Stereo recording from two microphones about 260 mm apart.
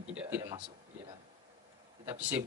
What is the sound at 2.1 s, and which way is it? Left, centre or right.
Speech, centre.